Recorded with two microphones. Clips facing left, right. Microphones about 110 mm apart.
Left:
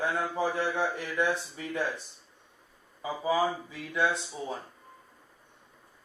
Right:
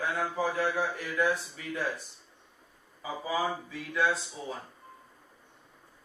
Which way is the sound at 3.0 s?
20° left (ahead or behind).